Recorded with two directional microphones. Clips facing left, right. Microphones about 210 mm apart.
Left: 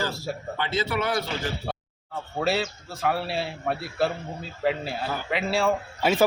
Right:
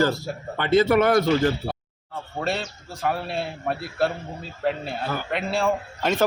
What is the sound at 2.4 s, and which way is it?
A man's voice, 5° left (ahead or behind).